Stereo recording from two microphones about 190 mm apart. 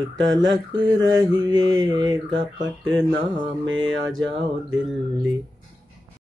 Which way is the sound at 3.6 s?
90° right.